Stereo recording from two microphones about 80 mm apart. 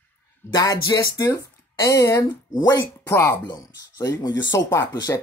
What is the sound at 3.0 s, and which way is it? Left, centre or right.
Speech, left.